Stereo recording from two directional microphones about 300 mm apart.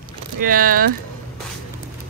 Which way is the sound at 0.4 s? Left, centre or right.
Right.